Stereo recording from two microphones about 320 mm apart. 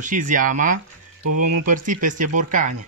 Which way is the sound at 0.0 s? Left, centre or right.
Right.